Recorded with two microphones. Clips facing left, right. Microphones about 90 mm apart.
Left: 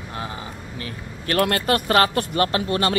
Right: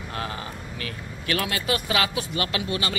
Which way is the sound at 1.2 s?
50° left (ahead or behind).